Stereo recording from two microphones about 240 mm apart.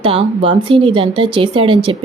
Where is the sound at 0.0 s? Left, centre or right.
Right.